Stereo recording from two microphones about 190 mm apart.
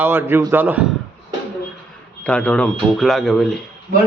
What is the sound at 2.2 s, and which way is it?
Speech, 5° left (ahead or behind).